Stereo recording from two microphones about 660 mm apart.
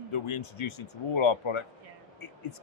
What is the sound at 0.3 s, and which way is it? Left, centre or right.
A man's voice, left.